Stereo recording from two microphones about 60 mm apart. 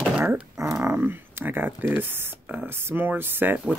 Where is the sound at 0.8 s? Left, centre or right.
Right.